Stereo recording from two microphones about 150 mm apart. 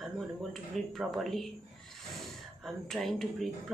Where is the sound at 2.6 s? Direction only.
Centre (ahead or behind).